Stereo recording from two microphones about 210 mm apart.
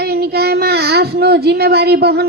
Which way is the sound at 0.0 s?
50° right (ahead or behind).